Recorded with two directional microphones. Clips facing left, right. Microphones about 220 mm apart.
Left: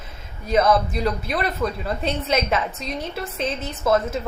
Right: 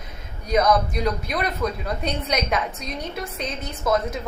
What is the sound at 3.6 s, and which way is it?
Speech, 5° left (ahead or behind).